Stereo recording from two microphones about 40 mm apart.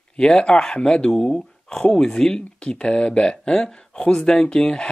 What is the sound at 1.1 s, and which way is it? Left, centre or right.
Speech, centre.